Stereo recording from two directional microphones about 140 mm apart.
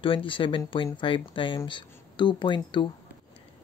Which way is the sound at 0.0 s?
40° left (ahead or behind).